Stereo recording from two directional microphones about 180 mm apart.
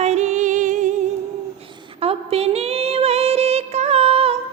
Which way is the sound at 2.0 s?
35° right (ahead or behind).